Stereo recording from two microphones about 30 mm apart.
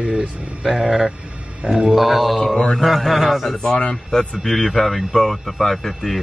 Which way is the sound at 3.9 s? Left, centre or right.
Left.